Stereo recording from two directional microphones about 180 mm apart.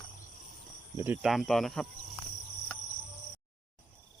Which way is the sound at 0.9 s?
10° right (ahead or behind).